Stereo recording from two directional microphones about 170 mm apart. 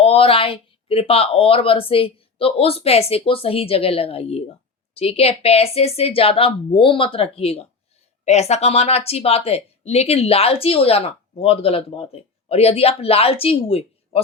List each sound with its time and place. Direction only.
0.0 s speech: 35° left (ahead or behind)